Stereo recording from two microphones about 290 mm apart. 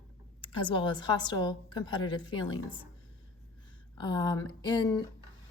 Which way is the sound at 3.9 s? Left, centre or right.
Centre.